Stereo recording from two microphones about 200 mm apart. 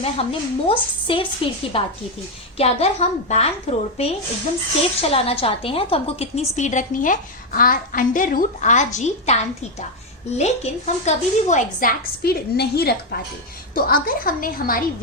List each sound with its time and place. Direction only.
0.0 s a woman's voice: 30° left (ahead or behind); by 14.8 s 45° left (ahead or behind)